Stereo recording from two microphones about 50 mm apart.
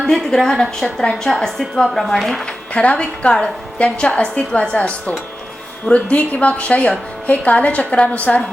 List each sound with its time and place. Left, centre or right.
0.0 s a woman's voice: centre
2.7 s a woman's voice: left